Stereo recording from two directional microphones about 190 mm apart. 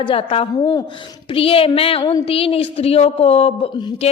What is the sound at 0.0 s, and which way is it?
A woman's voice, 30° left (ahead or behind).